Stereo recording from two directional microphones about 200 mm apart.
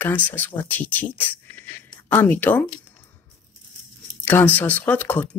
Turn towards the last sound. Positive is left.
turn(degrees=10)  # may be behind; listen again after turning